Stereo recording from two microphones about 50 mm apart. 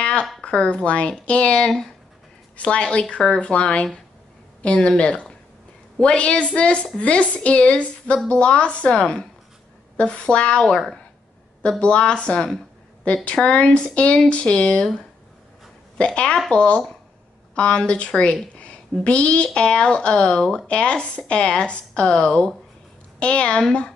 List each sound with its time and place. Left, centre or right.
0.0 s a sound: left
0.4 s a woman's voice: left
11.8 s a woman's voice: left
16.0 s a woman's voice: left